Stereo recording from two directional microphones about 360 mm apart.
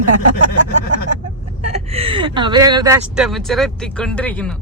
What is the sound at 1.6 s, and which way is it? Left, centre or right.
Speech, centre.